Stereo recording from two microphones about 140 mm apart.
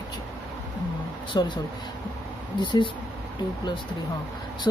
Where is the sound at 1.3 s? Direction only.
30° left (ahead or behind).